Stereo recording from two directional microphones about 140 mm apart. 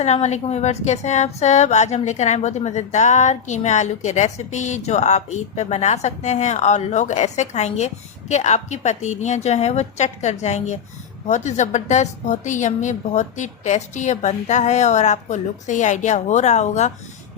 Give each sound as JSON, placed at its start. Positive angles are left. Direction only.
{"t": 0.0, "sound": "a woman's voice", "side_deg": 50}